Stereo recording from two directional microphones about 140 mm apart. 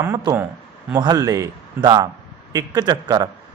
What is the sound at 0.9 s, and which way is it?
A man's voice, 30° right (ahead or behind).